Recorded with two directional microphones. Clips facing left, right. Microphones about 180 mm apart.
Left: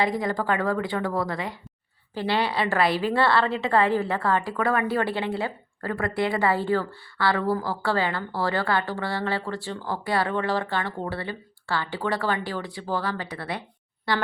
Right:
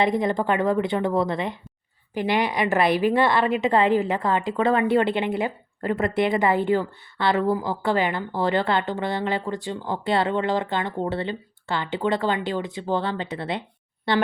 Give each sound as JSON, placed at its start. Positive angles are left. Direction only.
{"t": 0.0, "sound": "a woman's voice", "side_deg": -20}